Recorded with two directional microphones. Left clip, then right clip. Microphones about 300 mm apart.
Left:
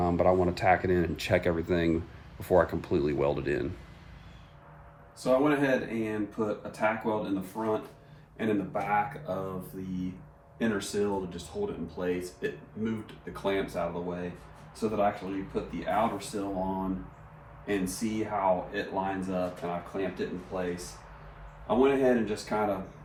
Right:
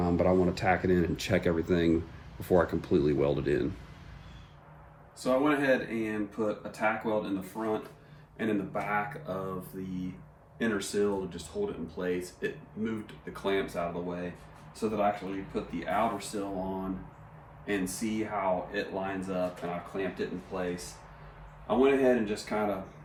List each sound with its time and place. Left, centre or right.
0.0 s speech: left
5.2 s speech: centre
14.8 s speech: centre
21.7 s speech: centre